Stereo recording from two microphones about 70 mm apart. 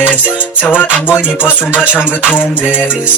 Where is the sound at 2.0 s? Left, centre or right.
Left.